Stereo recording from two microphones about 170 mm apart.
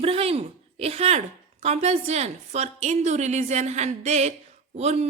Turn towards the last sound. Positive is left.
turn(degrees=-40)  # may be behind; listen again after turning